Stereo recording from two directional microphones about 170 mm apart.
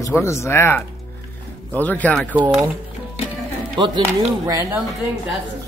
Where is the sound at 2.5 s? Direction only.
5° right (ahead or behind).